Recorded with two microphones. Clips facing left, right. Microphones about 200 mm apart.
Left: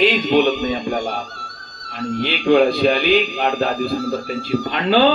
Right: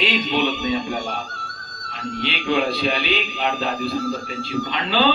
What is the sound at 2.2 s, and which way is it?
A man's voice, 50° left (ahead or behind).